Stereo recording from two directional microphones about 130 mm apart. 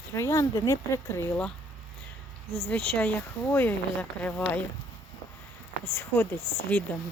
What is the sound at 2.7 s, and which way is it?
Speech, 10° left (ahead or behind).